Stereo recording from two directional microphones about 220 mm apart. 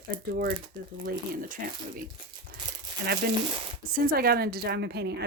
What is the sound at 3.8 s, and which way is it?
A woman's voice, 40° right (ahead or behind).